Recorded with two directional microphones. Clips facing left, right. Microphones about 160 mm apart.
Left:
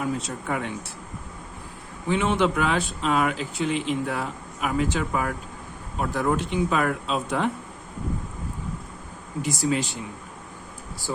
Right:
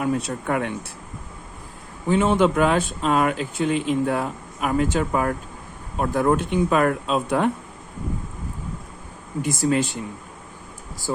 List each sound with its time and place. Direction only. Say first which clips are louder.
0.0 s speech: right 4 dB; 60° right (ahead or behind)
2.0 s speech: right 4 dB; 40° right (ahead or behind)
9.4 s speech: right 4 dB; 50° right (ahead or behind)